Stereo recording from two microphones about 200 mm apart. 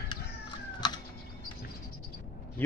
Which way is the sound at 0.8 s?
20° left (ahead or behind).